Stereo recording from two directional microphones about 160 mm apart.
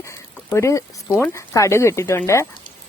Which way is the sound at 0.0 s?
15° left (ahead or behind).